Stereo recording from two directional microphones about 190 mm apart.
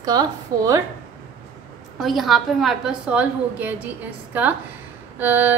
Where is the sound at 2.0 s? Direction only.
Centre (ahead or behind).